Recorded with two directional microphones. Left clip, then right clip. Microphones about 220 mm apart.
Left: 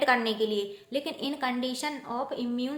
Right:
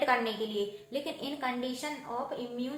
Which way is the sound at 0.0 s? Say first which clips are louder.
Left 4 dB; 45° left (ahead or behind).